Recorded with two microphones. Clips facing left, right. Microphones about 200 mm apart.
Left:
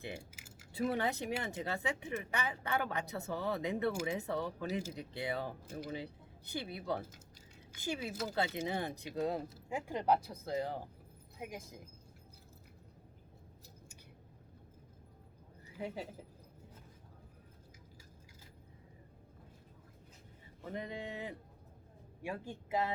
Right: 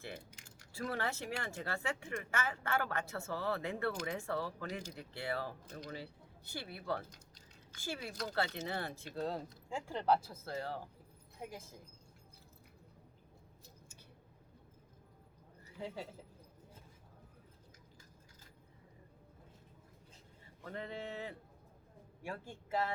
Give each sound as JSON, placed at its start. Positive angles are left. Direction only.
{"t": 0.0, "sound": "keys jangling", "side_deg": 10}
{"t": 0.7, "sound": "speech", "side_deg": 20}
{"t": 7.1, "sound": "typing", "side_deg": 5}
{"t": 8.1, "sound": "speech", "side_deg": 5}
{"t": 20.6, "sound": "speech", "side_deg": 15}